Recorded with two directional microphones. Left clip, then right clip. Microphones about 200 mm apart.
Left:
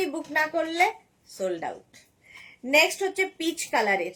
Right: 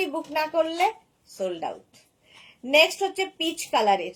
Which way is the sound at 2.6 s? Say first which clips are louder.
Right 2 dB; 15° left (ahead or behind).